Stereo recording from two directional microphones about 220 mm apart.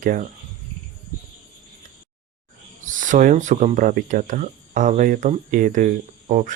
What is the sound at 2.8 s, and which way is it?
Speech, 35° right (ahead or behind).